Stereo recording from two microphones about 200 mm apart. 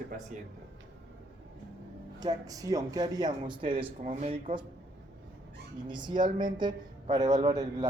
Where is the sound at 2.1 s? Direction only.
20° right (ahead or behind).